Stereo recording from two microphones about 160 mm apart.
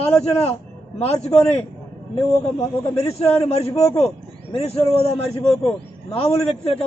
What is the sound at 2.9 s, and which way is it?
A man's voice, 40° left (ahead or behind).